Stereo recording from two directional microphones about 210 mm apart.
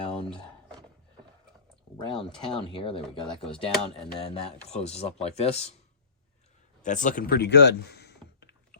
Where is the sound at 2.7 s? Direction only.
25° left (ahead or behind).